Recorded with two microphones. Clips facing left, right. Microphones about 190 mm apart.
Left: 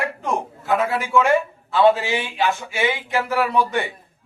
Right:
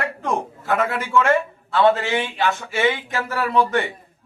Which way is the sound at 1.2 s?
15° left (ahead or behind).